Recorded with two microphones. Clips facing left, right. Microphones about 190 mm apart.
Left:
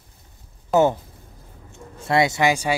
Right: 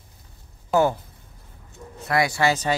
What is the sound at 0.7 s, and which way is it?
Speech, 20° left (ahead or behind).